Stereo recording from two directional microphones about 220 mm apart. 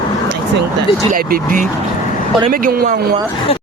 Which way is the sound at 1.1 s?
40° right (ahead or behind).